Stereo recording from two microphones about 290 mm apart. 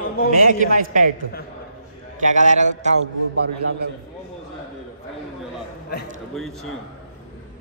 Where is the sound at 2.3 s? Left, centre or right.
Right.